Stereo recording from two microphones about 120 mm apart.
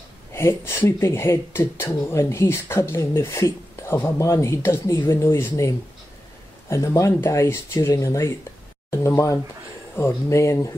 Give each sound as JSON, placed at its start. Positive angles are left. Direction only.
{"t": 0.3, "sound": "speech", "side_deg": 20}